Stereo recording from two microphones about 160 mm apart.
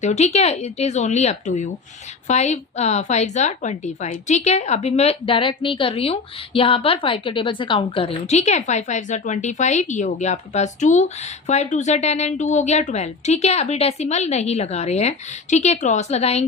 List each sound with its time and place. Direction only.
0.0 s a woman's voice: 45° left (ahead or behind)